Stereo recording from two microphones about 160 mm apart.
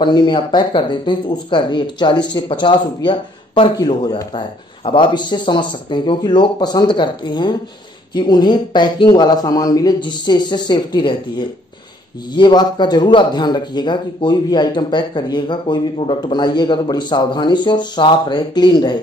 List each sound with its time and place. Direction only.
0.0 s speech: 30° left (ahead or behind)